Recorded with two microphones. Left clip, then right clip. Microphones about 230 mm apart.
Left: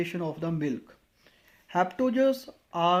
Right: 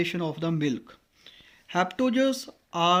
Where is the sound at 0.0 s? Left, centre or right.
Right.